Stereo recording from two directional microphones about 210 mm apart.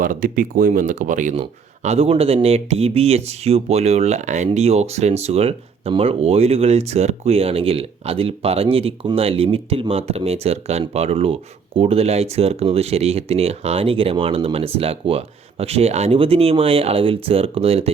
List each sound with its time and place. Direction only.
0.0 s speech: 40° right (ahead or behind)